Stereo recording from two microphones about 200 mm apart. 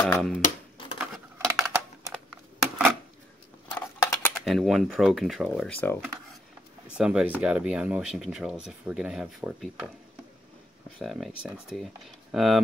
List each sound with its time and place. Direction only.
0.1 s speech: centre (ahead or behind)
1.5 s a sound: 15° right (ahead or behind)
2.1 s typing: centre (ahead or behind)
3.7 s speech: 5° left (ahead or behind)
7.0 s speech: 5° right (ahead or behind)
11.0 s speech: centre (ahead or behind)